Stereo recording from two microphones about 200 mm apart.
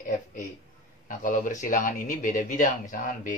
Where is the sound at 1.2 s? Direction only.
40° left (ahead or behind).